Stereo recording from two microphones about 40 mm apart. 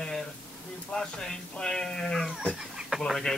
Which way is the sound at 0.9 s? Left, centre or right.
Centre.